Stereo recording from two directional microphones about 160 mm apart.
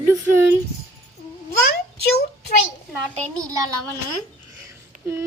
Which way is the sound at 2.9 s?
20° right (ahead or behind).